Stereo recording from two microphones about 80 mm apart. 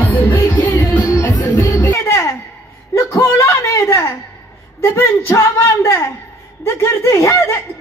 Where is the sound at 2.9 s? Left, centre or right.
Left.